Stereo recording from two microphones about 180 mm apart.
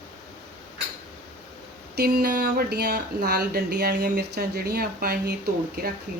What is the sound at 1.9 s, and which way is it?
Speech, 55° right (ahead or behind).